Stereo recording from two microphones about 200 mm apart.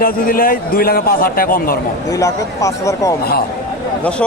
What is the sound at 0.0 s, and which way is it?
A man's voice, 45° left (ahead or behind).